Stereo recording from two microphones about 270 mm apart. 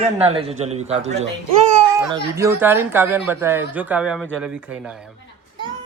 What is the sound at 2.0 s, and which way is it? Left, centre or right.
Speech, centre.